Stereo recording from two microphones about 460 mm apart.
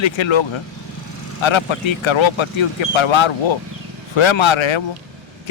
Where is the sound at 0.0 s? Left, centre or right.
Left.